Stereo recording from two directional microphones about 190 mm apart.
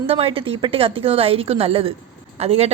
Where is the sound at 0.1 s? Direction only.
30° right (ahead or behind).